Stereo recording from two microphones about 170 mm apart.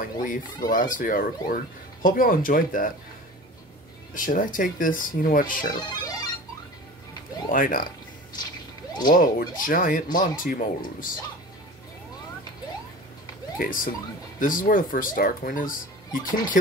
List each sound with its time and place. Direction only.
0.0 s speech: 50° left (ahead or behind)
4.1 s speech: 50° left (ahead or behind)
5.7 s music: 25° left (ahead or behind)
7.5 s speech: 55° left (ahead or behind)
9.1 s speech: 55° left (ahead or behind)
13.6 s speech: 55° left (ahead or behind)